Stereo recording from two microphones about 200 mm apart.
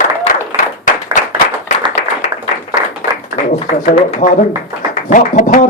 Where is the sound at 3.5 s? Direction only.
35° left (ahead or behind).